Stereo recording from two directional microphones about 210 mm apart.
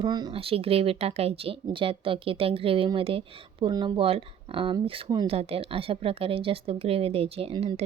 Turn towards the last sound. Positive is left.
turn(degrees=-25)  # may be behind; listen again after turning